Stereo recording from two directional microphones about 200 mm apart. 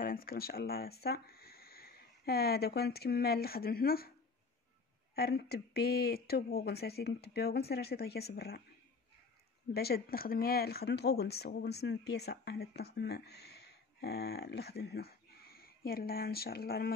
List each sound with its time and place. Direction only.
0.0 s speech: 45° left (ahead or behind)
5.1 s speech: 55° left (ahead or behind)
9.8 s speech: 50° left (ahead or behind)